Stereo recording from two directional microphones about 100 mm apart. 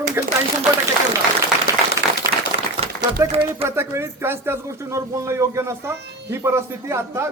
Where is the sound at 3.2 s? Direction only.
25° right (ahead or behind).